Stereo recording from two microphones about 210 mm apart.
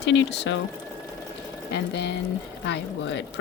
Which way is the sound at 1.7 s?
55° left (ahead or behind).